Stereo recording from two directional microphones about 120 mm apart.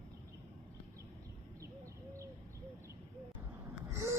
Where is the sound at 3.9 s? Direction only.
25° right (ahead or behind).